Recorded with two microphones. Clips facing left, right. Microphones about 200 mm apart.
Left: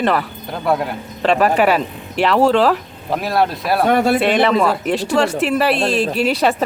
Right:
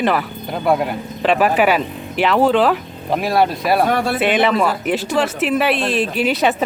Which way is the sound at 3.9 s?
25° left (ahead or behind).